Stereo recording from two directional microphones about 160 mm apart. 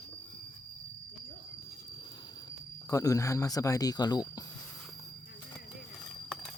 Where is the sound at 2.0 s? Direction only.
30° left (ahead or behind).